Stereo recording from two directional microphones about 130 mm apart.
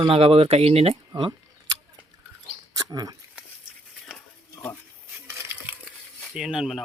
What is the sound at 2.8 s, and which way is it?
Speech, 30° right (ahead or behind).